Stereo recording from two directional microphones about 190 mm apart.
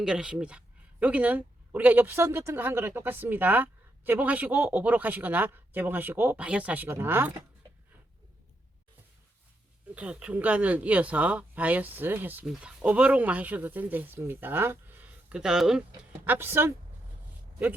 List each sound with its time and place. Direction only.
0.0 s speech: 5° right (ahead or behind)
9.9 s speech: 5° right (ahead or behind)